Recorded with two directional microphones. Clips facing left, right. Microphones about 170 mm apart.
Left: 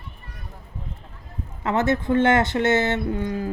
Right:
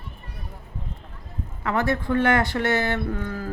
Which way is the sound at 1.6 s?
25° left (ahead or behind).